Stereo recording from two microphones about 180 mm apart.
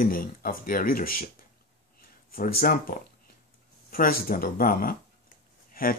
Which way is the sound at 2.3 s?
50° left (ahead or behind).